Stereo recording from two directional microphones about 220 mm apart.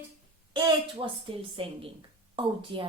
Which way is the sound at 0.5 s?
20° right (ahead or behind).